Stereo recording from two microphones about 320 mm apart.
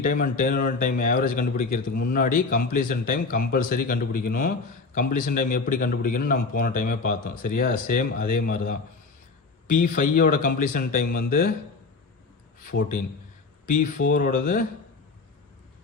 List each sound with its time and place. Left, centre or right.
0.0 s a man's voice: left
12.6 s a man's voice: left